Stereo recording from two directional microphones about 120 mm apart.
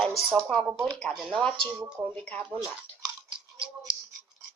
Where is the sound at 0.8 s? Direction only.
5° left (ahead or behind).